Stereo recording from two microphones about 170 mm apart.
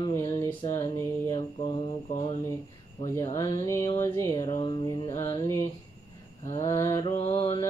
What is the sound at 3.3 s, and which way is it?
Speech, 20° left (ahead or behind).